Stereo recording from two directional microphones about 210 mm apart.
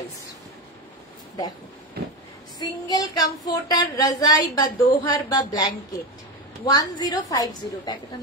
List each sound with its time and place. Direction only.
2.6 s speech: 20° left (ahead or behind)